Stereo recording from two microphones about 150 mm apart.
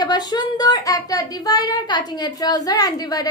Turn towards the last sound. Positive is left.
turn(degrees=25)  # may be behind; listen again after turning